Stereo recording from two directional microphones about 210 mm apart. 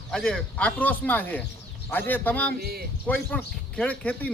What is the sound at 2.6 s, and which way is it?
Speech, 45° right (ahead or behind).